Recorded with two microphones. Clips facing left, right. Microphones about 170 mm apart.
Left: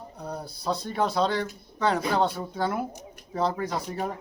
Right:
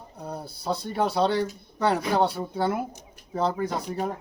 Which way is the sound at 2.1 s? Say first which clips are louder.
Right 2 dB; 5° right (ahead or behind).